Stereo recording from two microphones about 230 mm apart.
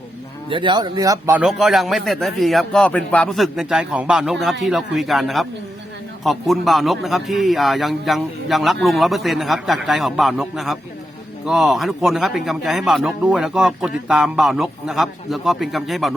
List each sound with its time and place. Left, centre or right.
0.5 s speech: centre
1.4 s a man's voice: centre